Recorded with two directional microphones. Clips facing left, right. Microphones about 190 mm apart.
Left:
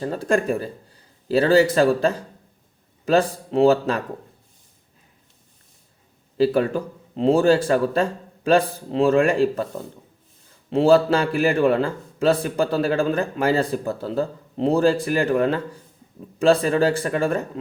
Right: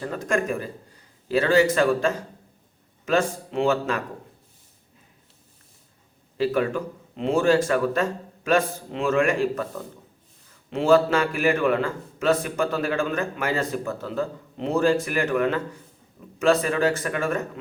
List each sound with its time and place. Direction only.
0.0 s a man's voice: 30° left (ahead or behind)
6.3 s a man's voice: 35° left (ahead or behind)